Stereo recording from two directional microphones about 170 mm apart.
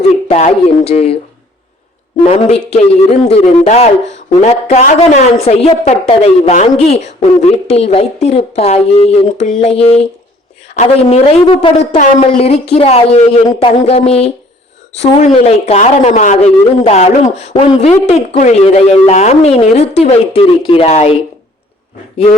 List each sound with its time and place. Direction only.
0.3 s a woman's voice: 40° left (ahead or behind)
2.2 s a woman's voice: 35° left (ahead or behind)
15.4 s a woman's voice: 40° left (ahead or behind)